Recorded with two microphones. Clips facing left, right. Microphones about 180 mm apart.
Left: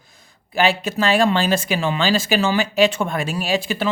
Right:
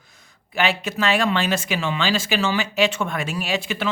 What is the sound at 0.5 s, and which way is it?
Speech, 35° left (ahead or behind).